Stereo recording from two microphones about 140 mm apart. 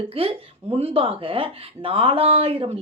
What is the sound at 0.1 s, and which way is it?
Speech, 45° right (ahead or behind).